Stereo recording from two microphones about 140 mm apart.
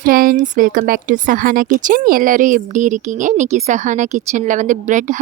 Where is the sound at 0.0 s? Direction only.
90° right.